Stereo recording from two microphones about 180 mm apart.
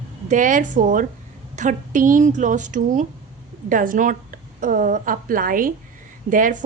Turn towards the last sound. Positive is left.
turn(degrees=-45)  # may be behind; listen again after turning